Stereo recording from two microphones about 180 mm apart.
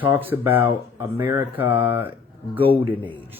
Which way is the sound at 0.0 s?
10° right (ahead or behind).